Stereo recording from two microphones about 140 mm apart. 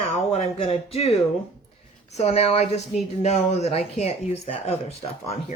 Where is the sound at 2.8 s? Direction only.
Centre (ahead or behind).